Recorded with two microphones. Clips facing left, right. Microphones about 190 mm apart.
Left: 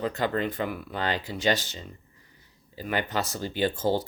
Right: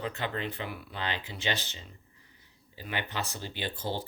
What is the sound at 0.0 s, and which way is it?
Speech, 40° left (ahead or behind).